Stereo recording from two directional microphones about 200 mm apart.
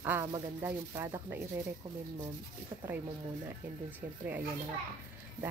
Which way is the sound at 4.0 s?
10° right (ahead or behind).